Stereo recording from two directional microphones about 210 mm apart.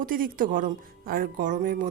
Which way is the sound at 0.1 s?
40° right (ahead or behind).